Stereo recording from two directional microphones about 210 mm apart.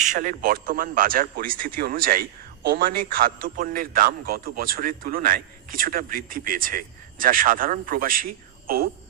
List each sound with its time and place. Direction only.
0.0 s a man's voice: 40° right (ahead or behind)